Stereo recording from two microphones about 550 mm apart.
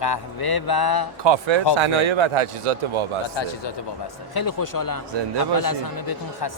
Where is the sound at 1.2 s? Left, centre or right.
Right.